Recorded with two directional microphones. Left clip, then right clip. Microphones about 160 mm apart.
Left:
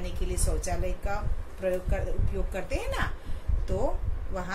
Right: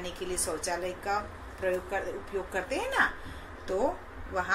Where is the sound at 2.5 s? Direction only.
10° left (ahead or behind).